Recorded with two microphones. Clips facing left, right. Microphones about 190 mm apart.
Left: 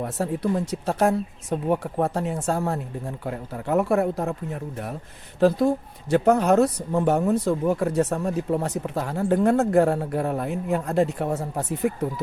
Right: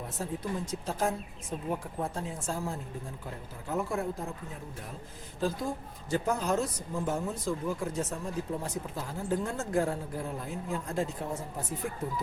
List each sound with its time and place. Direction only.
0.0 s speech: 70° left (ahead or behind)